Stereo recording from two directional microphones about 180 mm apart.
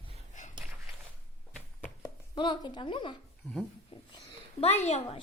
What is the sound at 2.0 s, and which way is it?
Speech, 25° left (ahead or behind).